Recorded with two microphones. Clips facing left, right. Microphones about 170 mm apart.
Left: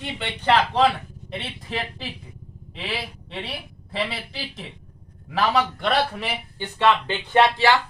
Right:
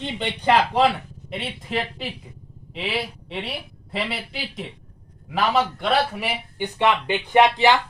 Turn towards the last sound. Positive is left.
turn(degrees=-15)  # may be behind; listen again after turning